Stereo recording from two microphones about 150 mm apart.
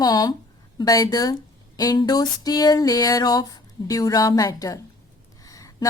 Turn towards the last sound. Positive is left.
turn(degrees=25)  # may be behind; listen again after turning